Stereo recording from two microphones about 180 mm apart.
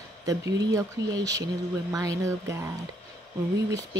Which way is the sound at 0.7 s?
20° right (ahead or behind).